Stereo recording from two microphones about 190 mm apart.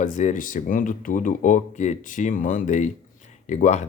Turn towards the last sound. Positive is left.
turn(degrees=40)  # may be behind; listen again after turning